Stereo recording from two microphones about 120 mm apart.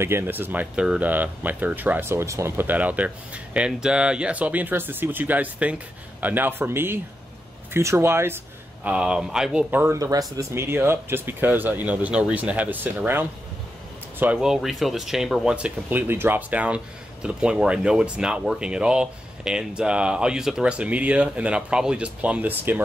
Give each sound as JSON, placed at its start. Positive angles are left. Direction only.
{"t": 0.0, "sound": "speech", "side_deg": -20}
{"t": 8.8, "sound": "speech", "side_deg": -5}
{"t": 9.9, "sound": "speech", "side_deg": -30}